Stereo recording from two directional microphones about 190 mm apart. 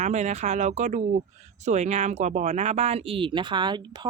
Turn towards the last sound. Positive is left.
turn(degrees=-25)  # may be behind; listen again after turning